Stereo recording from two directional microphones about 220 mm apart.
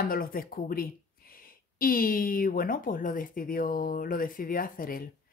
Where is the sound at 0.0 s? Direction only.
40° left (ahead or behind).